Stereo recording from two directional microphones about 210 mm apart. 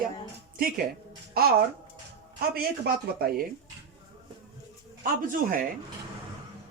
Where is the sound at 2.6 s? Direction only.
45° right (ahead or behind).